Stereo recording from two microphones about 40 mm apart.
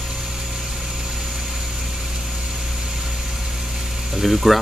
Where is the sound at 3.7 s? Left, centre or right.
Centre.